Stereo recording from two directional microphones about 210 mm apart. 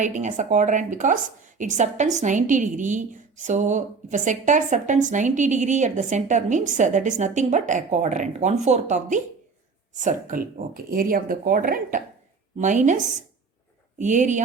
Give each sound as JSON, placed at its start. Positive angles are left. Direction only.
{"t": 0.0, "sound": "a woman's voice", "side_deg": -35}